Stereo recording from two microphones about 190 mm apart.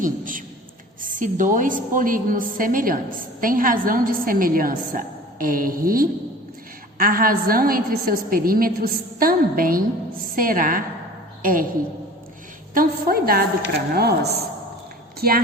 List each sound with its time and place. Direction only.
0.0 s a sound: 45° right (ahead or behind)
1.0 s a woman's voice: 45° right (ahead or behind)
12.7 s a woman's voice: 50° right (ahead or behind)